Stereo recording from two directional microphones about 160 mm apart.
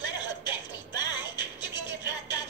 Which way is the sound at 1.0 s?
25° left (ahead or behind).